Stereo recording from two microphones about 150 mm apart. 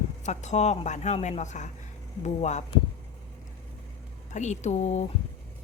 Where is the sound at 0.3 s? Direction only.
50° left (ahead or behind).